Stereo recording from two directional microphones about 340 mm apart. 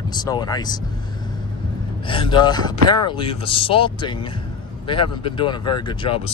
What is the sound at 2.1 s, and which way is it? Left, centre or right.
Speech, centre.